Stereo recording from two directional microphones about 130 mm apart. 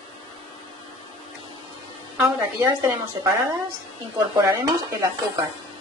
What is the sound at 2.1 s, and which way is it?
A woman's voice, 25° right (ahead or behind).